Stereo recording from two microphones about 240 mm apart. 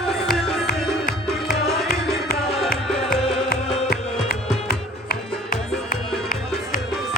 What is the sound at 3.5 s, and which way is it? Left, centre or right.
Music, left.